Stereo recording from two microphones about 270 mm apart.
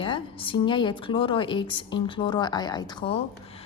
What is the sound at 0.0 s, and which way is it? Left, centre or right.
A woman's voice, centre.